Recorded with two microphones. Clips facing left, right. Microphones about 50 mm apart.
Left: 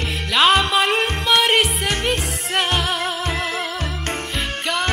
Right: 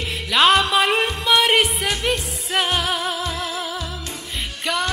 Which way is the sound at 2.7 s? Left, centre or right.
Centre.